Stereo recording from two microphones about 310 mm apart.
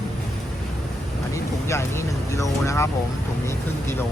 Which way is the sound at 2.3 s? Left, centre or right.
Centre.